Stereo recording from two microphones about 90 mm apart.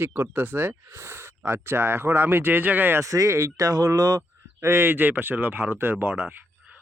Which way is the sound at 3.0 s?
40° right (ahead or behind).